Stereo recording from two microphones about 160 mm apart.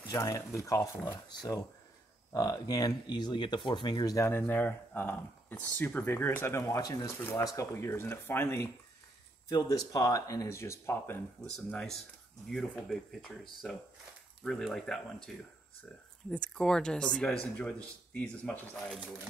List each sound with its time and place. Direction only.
0.1 s speech: 20° left (ahead or behind)
11.5 s speech: 5° left (ahead or behind)